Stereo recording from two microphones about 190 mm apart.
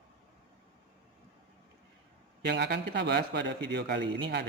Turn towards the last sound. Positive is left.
turn(degrees=-60)  # may be behind; listen again after turning